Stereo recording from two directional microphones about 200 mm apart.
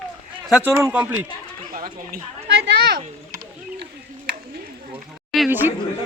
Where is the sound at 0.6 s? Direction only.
15° right (ahead or behind).